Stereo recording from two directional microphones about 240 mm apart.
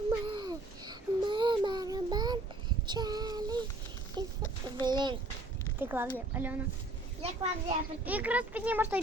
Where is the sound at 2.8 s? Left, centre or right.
Centre.